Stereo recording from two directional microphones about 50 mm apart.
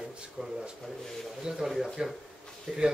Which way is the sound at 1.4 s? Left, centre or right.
Centre.